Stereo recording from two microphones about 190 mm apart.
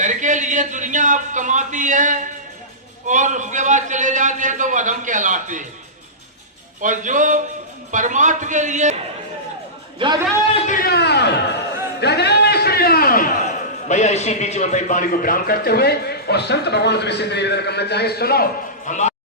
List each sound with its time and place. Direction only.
0.0 s a man's voice: 40° right (ahead or behind)
6.8 s a man's voice: 40° right (ahead or behind)
10.0 s a man's voice: 25° right (ahead or behind)
10.5 s a sound: 45° left (ahead or behind)
13.8 s a man's voice: 40° left (ahead or behind); by 18.4 s 55° left (ahead or behind)
18.9 s speech: 40° left (ahead or behind)